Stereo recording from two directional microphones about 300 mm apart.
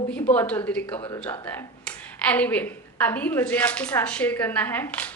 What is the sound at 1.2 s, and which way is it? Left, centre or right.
A woman's voice, centre.